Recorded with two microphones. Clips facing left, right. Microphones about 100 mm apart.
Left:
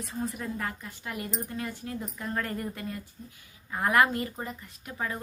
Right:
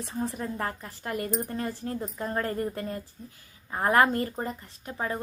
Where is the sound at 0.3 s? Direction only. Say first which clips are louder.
Right 2 dB; 30° right (ahead or behind).